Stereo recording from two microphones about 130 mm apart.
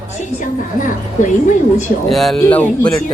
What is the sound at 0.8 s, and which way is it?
A woman's voice, 80° left.